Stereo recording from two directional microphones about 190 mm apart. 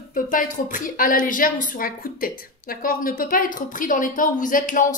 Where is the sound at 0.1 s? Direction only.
45° left (ahead or behind).